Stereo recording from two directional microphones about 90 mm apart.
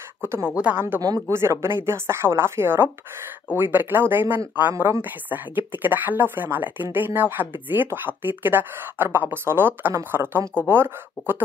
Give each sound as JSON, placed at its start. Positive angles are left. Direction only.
{"t": 0.2, "sound": "speech", "side_deg": -30}
{"t": 0.6, "sound": "speech", "side_deg": -20}